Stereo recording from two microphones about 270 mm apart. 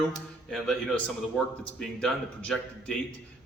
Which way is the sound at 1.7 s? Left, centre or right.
Centre.